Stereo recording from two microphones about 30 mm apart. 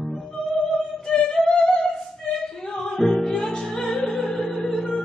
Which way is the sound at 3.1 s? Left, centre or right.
Centre.